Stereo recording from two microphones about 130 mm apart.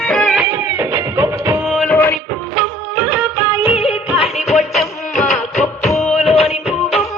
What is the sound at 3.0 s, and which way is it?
Music, 15° right (ahead or behind).